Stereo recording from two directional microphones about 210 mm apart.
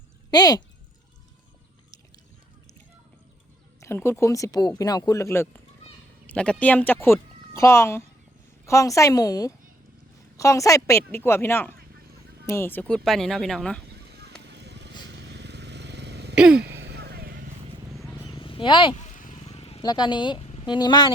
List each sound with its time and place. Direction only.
0.3 s speech: 20° left (ahead or behind)
3.8 s speech: 10° left (ahead or behind)
13.9 s vehicle: 50° right (ahead or behind)
16.3 s throat clearing: 5° right (ahead or behind)
16.6 s vehicle: 55° right (ahead or behind)
18.3 s a sound: 25° left (ahead or behind)
19.1 s a sound: 35° left (ahead or behind); by 21.1 s 20° left (ahead or behind)